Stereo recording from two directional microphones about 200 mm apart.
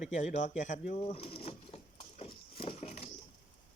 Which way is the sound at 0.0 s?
35° left (ahead or behind).